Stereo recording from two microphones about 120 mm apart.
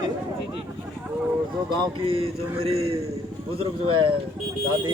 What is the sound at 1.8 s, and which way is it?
Speech, 50° right (ahead or behind).